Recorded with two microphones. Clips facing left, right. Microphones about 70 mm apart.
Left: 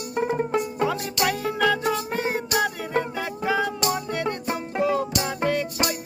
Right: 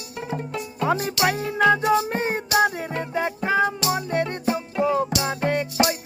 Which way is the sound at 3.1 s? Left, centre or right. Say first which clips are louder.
Right 3 dB; right.